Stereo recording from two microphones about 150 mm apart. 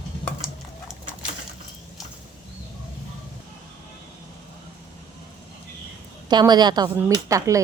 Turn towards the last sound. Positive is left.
turn(degrees=-20)  # may be behind; listen again after turning